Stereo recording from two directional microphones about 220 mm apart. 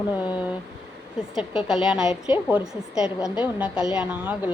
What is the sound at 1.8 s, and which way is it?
A woman's voice, 5° right (ahead or behind).